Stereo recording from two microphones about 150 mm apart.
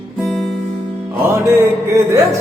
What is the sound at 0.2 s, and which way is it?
Music, 5° right (ahead or behind).